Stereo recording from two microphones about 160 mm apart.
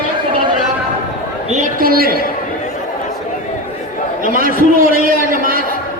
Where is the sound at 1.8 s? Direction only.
70° right (ahead or behind).